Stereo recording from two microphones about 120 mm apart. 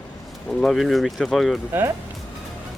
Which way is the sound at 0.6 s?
5° left (ahead or behind).